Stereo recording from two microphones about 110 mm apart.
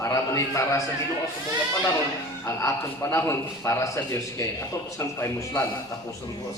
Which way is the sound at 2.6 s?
25° left (ahead or behind).